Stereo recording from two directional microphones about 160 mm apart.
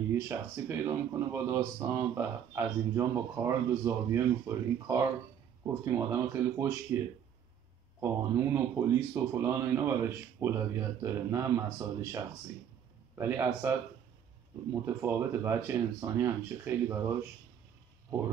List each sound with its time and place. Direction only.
0.1 s speech: 15° right (ahead or behind)
8.0 s speech: 15° right (ahead or behind)